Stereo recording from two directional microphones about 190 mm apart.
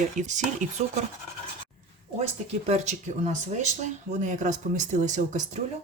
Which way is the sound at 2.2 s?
35° right (ahead or behind).